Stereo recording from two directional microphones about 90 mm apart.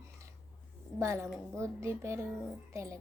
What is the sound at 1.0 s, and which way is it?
Speech, 30° right (ahead or behind).